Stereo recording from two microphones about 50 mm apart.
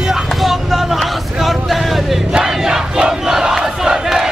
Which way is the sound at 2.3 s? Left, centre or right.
Centre.